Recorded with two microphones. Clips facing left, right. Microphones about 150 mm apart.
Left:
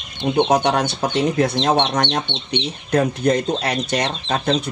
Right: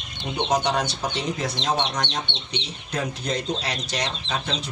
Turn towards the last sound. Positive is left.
turn(degrees=50)  # may be behind; listen again after turning